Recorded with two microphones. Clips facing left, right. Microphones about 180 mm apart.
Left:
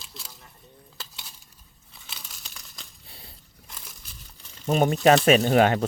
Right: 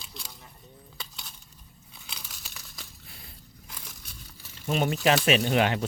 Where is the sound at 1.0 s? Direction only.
Centre (ahead or behind).